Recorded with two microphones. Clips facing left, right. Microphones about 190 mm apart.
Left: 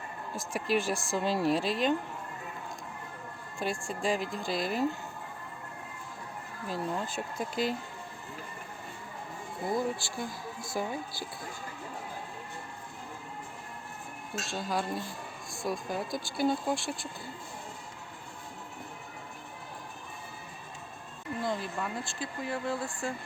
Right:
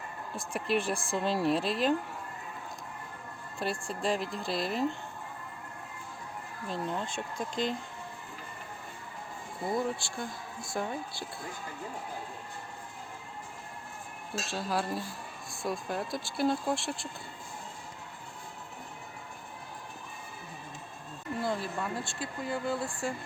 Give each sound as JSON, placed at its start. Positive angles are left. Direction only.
{"t": 0.3, "sound": "speech", "side_deg": 0}
{"t": 3.6, "sound": "speech", "side_deg": 0}
{"t": 6.7, "sound": "speech", "side_deg": 5}
{"t": 9.6, "sound": "speech", "side_deg": 0}
{"t": 14.4, "sound": "speech", "side_deg": 0}
{"t": 21.4, "sound": "speech", "side_deg": 0}